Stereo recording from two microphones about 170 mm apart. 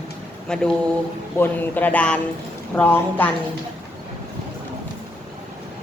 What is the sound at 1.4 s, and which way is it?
Speech, 10° left (ahead or behind).